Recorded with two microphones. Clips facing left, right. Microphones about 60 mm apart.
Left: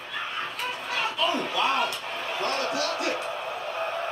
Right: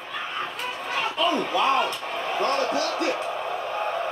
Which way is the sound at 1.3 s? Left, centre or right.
Right.